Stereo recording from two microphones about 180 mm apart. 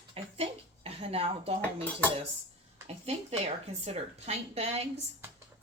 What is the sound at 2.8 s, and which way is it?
Speech, 35° right (ahead or behind).